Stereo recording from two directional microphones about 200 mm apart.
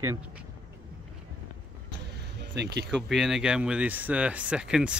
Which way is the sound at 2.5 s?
60° right (ahead or behind).